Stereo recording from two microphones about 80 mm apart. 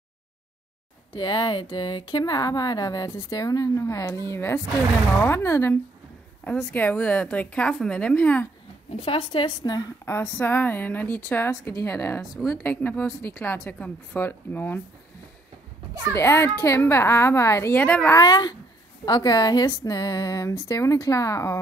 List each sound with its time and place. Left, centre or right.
1.1 s a woman's voice: left
6.4 s a woman's voice: left
9.3 s a woman's voice: left
10.0 s a woman's voice: left
12.2 s a woman's voice: centre
12.6 s a woman's voice: left
16.1 s a woman's voice: left
17.7 s a woman's voice: centre
18.2 s speech: left